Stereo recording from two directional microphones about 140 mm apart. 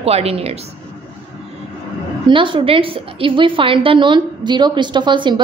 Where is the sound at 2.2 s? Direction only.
35° right (ahead or behind).